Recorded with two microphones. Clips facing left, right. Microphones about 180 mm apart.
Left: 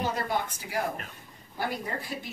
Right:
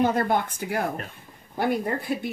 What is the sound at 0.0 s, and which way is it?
A woman's voice, 55° right (ahead or behind).